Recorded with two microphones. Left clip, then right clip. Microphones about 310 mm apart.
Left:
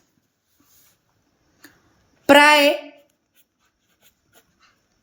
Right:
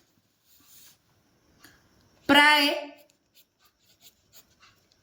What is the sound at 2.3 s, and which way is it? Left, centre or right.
Speech, left.